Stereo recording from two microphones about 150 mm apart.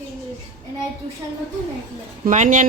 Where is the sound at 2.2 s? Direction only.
55° right (ahead or behind).